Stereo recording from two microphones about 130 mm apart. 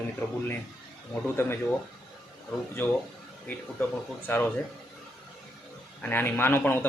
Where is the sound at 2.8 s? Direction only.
15° left (ahead or behind).